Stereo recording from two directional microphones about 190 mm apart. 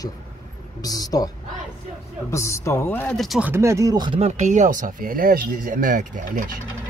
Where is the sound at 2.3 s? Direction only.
15° left (ahead or behind).